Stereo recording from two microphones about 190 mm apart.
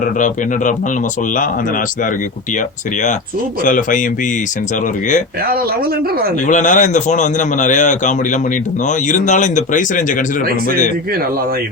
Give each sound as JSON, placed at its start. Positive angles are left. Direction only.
{"t": 0.0, "sound": "a man's voice", "side_deg": 40}
{"t": 3.6, "sound": "speech", "side_deg": 45}
{"t": 6.5, "sound": "a man's voice", "side_deg": 40}